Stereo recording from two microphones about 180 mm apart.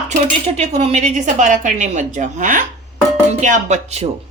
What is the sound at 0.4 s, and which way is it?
Speech, 35° right (ahead or behind).